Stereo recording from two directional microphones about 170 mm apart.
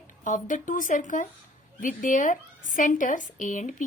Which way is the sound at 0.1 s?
50° left (ahead or behind).